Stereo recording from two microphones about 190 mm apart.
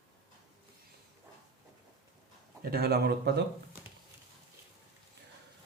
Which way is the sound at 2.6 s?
55° right (ahead or behind).